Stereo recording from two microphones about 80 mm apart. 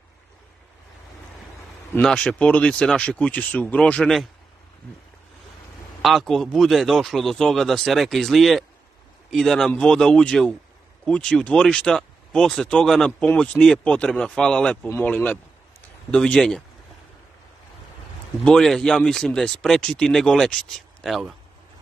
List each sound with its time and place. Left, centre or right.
2.0 s speech: centre
6.0 s speech: centre
16.3 s speech: centre
18.4 s speech: centre